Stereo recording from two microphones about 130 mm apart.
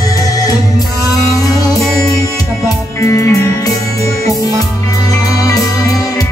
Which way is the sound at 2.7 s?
25° left (ahead or behind).